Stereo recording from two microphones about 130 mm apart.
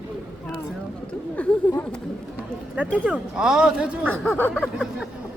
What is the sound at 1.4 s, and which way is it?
Speech, 10° left (ahead or behind).